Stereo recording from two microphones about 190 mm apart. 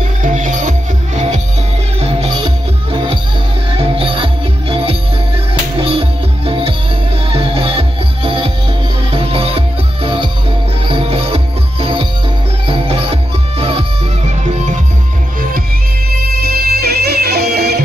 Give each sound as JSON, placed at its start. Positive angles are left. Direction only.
{"t": 0.2, "sound": "music", "side_deg": -40}
{"t": 16.4, "sound": "music", "side_deg": -55}